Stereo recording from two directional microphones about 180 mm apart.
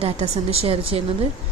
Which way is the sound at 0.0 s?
35° right (ahead or behind).